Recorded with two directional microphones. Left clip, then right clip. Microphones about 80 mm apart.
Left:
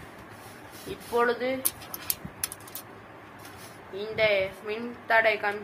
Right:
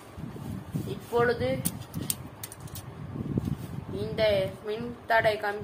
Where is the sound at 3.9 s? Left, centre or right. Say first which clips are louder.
Left 1 dB; right.